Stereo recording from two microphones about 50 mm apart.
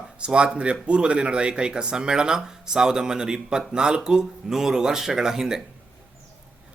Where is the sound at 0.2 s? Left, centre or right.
Centre.